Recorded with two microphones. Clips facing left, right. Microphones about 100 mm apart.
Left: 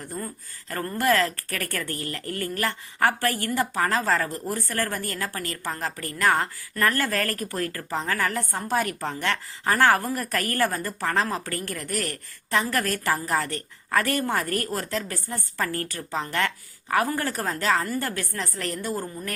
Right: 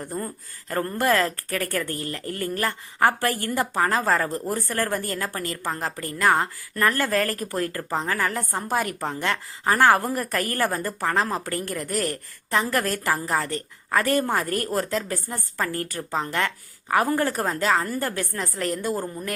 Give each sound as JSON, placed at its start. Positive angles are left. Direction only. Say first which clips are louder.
{"t": 0.7, "sound": "a woman's voice", "louder": "right 1 dB", "side_deg": -25}
{"t": 3.2, "sound": "a woman's voice", "louder": "right 1 dB", "side_deg": -30}
{"t": 3.5, "sound": "a woman's voice", "louder": "right 2 dB", "side_deg": -15}